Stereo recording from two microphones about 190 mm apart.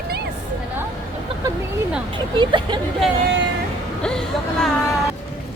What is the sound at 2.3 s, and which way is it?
Speech, 25° right (ahead or behind).